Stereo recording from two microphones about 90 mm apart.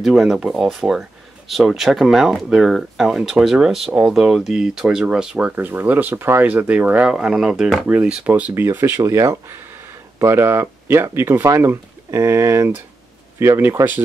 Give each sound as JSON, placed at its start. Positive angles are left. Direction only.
{"t": 0.0, "sound": "speech", "side_deg": -5}
{"t": 5.6, "sound": "speech", "side_deg": -20}